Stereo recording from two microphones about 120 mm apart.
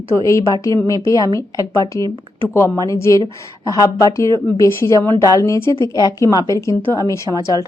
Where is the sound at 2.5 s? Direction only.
25° left (ahead or behind).